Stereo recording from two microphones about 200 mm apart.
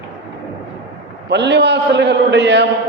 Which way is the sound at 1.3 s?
60° right (ahead or behind).